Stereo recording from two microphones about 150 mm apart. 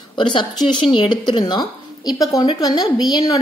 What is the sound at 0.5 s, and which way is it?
Speech, centre (ahead or behind).